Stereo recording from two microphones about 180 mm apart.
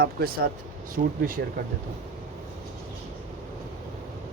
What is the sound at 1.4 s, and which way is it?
Speech, 65° right (ahead or behind).